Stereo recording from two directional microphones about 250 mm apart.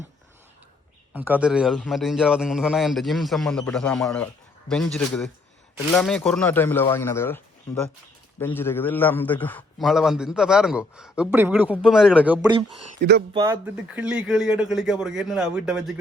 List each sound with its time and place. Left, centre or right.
1.1 s a man's voice: centre
8.5 s a man's voice: centre
13.0 s speech: right
13.3 s a man's voice: centre